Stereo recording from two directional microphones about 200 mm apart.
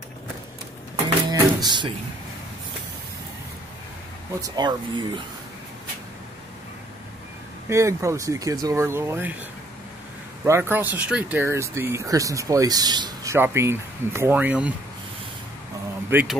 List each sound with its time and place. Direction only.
1.3 s music: 20° right (ahead or behind)
4.4 s speech: 20° right (ahead or behind)
7.7 s speech: 15° right (ahead or behind)
10.4 s speech: 10° right (ahead or behind)
16.1 s speech: 10° right (ahead or behind)